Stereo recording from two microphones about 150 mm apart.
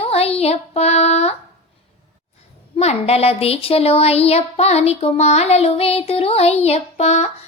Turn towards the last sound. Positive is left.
turn(degrees=45)  # may be behind; listen again after turning